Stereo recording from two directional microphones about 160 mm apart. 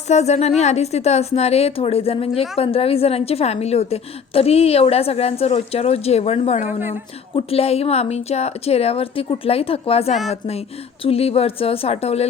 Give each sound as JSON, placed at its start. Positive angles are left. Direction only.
{"t": 0.1, "sound": "a woman's voice", "side_deg": 45}
{"t": 6.7, "sound": "a woman's voice", "side_deg": -15}
{"t": 7.3, "sound": "a woman's voice", "side_deg": 40}